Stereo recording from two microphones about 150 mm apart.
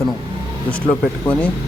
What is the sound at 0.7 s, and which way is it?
Speech, 10° left (ahead or behind).